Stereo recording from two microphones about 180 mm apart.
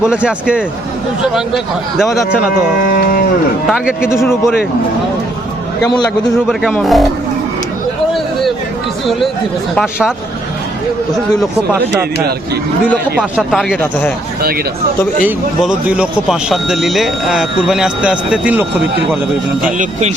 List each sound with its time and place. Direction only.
0.0 s speech: 5° right (ahead or behind)
2.9 s a sound: 55° left (ahead or behind)
3.7 s speech: 5° right (ahead or behind)
5.8 s a man's voice: 20° left (ahead or behind)
6.5 s speech: centre (ahead or behind)
9.7 s speech: 5° right (ahead or behind)
13.1 s speech: 5° right (ahead or behind)
15.2 s speech: 5° right (ahead or behind)
19.6 s speech: 40° right (ahead or behind)